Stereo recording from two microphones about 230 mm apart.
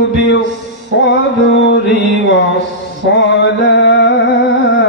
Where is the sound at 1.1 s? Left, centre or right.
Left.